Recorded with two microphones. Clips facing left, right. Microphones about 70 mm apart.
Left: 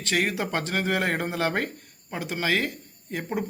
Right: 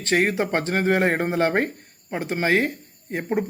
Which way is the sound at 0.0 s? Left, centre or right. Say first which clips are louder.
Right 5 dB; right.